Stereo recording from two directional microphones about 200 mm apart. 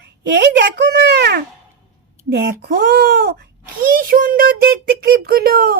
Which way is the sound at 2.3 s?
55° right (ahead or behind).